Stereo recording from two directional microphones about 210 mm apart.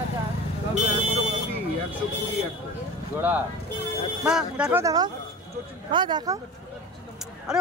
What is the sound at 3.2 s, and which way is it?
Speech, 10° right (ahead or behind).